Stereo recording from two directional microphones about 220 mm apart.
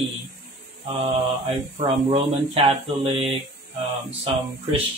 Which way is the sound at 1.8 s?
25° right (ahead or behind).